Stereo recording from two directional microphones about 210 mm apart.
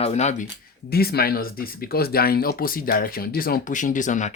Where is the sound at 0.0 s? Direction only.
30° left (ahead or behind).